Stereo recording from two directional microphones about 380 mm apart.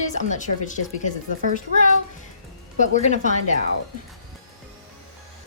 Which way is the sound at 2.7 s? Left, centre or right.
Centre.